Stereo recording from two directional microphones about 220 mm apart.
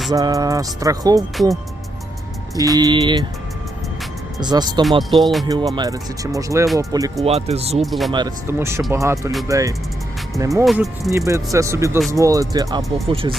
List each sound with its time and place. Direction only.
0.1 s speech: 15° right (ahead or behind)
2.6 s speech: 15° right (ahead or behind)
4.4 s speech: 20° right (ahead or behind)
5.1 s speech: centre (ahead or behind)
5.5 s speech: 20° right (ahead or behind)
7.3 s speech: 30° right (ahead or behind)
7.8 s speech: centre (ahead or behind)
8.1 s speech: 15° right (ahead or behind)
10.7 s speech: centre (ahead or behind)
11.3 s speech: 15° right (ahead or behind)